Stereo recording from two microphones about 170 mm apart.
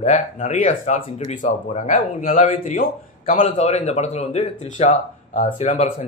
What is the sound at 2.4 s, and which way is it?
Speech, 35° left (ahead or behind).